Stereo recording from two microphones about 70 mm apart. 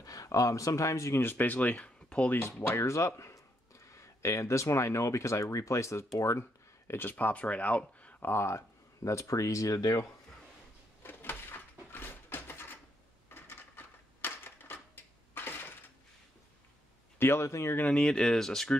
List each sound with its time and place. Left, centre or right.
0.0 s speech: left
1.2 s speech: left
2.0 s a sound: centre
2.7 s speech: left
6.9 s speech: left
8.3 s speech: left
11.0 s a sound: left
17.2 s speech: left
17.9 s speech: centre